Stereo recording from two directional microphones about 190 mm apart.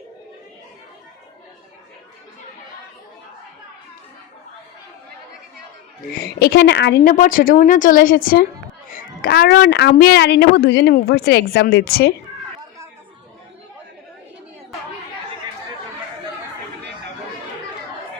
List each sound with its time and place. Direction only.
6.1 s a woman's voice: 55° left (ahead or behind)